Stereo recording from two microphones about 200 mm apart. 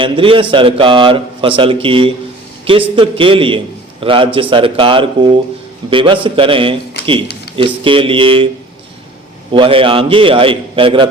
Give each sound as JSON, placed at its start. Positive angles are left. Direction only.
{"t": 0.0, "sound": "a man's voice", "side_deg": -25}
{"t": 9.5, "sound": "a man's voice", "side_deg": -25}